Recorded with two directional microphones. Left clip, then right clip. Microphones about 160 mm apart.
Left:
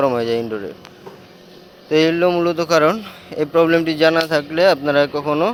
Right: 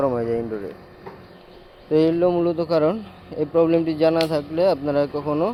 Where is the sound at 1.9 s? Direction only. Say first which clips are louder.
Left 3 dB; 10° right (ahead or behind).